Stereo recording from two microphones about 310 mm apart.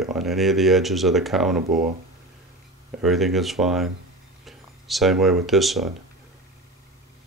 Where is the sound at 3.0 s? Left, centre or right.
Centre.